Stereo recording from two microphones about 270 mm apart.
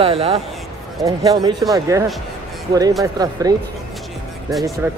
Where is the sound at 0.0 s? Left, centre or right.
Right.